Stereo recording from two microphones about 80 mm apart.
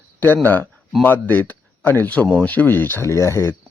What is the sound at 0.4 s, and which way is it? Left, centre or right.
A man's voice, left.